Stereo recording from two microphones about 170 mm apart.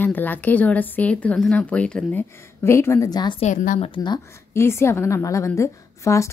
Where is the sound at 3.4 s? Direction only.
50° left (ahead or behind).